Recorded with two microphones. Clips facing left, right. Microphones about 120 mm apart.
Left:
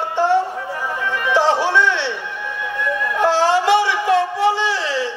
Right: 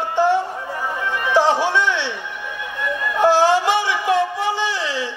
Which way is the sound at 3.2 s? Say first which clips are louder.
Right 2 dB; 15° right (ahead or behind).